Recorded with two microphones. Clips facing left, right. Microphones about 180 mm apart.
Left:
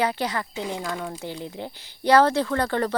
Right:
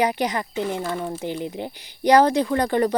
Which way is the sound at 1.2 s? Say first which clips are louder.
Right 5 dB; 20° right (ahead or behind).